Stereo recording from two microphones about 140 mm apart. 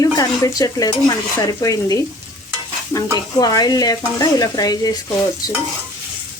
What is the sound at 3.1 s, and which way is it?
Stir, 30° left (ahead or behind).